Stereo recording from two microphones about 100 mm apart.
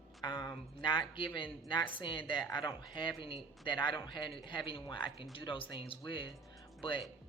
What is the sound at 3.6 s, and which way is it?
Speech, 50° left (ahead or behind).